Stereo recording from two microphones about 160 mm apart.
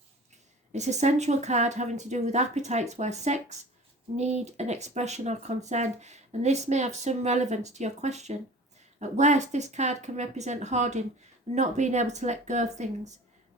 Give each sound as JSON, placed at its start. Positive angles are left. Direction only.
{"t": 0.7, "sound": "speech", "side_deg": -45}